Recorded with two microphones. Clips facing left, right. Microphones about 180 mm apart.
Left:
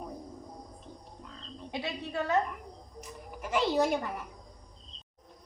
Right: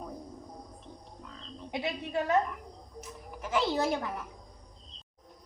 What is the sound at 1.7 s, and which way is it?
Speech, 20° right (ahead or behind).